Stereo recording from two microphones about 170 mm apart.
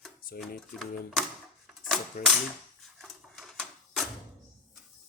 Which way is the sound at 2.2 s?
60° left (ahead or behind).